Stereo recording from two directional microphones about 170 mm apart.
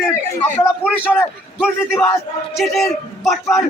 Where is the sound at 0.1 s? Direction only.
15° left (ahead or behind).